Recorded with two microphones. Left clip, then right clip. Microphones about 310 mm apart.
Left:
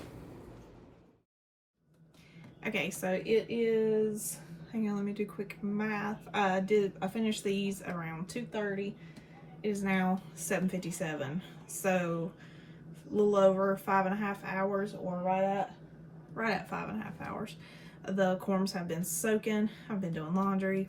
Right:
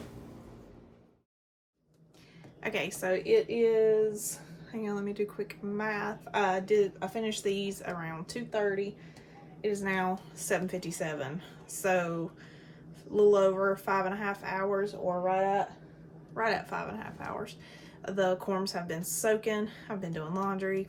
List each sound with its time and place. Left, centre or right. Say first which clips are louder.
2.6 s speech: right 2 dB; centre